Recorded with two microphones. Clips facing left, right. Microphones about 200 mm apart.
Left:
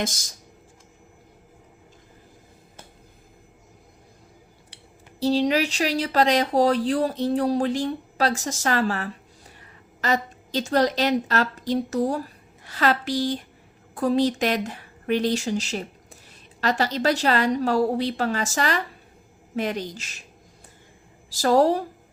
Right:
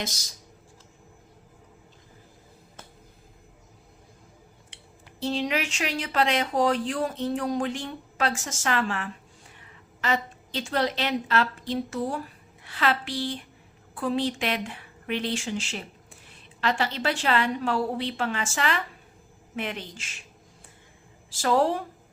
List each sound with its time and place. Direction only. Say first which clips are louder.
0.0 s speech: left 6 dB; 50° left (ahead or behind)
4.7 s a sound: left 2 dB; 35° left (ahead or behind)
5.2 s a woman's voice: left 7 dB; 35° left (ahead or behind)
21.2 s a woman's voice: left 5 dB; 40° left (ahead or behind)